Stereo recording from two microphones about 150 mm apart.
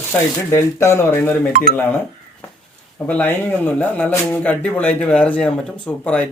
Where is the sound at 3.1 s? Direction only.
10° left (ahead or behind).